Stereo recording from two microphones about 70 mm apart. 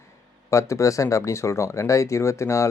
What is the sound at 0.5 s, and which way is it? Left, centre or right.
Speech, left.